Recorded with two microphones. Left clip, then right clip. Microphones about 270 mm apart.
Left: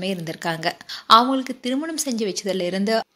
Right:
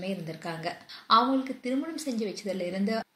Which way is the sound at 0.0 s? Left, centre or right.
Left.